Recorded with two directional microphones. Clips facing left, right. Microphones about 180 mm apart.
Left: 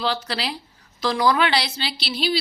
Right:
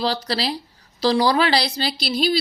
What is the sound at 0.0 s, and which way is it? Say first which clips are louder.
A woman's voice: right 3 dB; 35° right (ahead or behind).